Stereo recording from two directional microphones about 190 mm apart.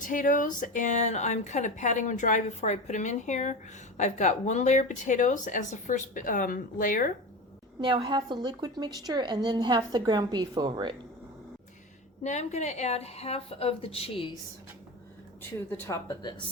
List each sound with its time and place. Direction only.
0.0 s speech: 45° left (ahead or behind)
7.8 s a woman's voice: 25° right (ahead or behind)
12.2 s speech: 35° left (ahead or behind)
15.4 s speech: 10° left (ahead or behind)